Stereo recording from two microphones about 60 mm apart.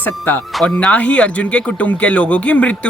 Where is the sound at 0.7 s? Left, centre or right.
Left.